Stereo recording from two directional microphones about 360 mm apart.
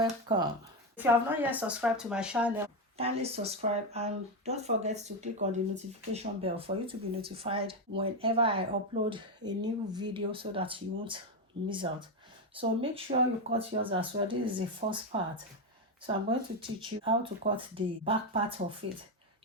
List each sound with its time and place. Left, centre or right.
0.0 s speech: centre
3.0 s speech: centre